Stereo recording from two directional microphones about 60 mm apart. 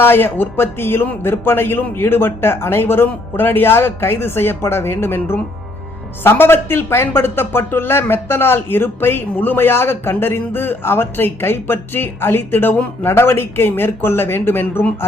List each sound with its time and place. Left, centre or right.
0.0 s speech: left